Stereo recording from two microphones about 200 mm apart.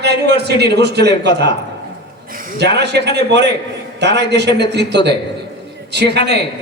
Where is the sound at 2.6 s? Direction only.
55° right (ahead or behind).